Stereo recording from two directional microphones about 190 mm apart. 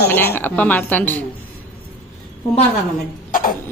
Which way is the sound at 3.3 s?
50° left (ahead or behind).